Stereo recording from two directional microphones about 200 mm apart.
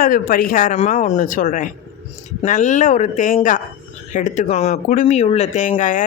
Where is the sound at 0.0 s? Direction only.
45° left (ahead or behind).